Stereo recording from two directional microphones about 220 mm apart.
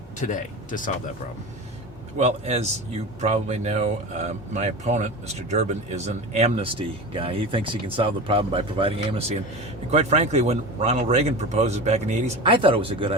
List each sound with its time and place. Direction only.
0.2 s speech: 35° left (ahead or behind)
2.1 s speech: 30° right (ahead or behind)